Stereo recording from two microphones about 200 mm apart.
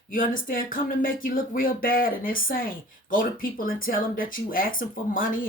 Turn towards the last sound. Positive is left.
turn(degrees=45)  # may be behind; listen again after turning